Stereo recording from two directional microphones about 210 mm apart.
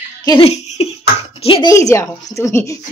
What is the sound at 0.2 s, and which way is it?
Laughter, 15° left (ahead or behind).